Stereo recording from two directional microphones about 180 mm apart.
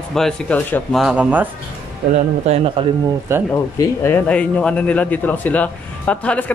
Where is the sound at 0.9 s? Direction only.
5° right (ahead or behind).